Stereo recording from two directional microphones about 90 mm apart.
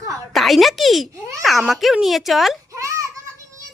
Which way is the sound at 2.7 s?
35° right (ahead or behind).